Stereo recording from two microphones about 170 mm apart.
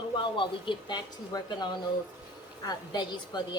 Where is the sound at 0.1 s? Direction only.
30° left (ahead or behind).